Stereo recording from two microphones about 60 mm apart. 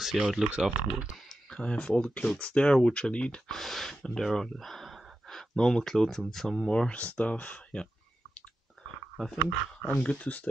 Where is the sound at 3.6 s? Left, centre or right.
Centre; by 7.8 s left.